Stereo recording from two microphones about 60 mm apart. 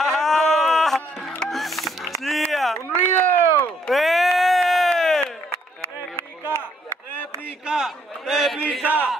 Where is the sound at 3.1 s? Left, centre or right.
Left.